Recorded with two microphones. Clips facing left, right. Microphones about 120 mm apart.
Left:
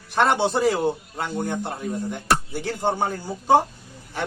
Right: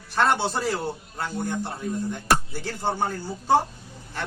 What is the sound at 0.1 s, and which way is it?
A man's voice, 15° left (ahead or behind).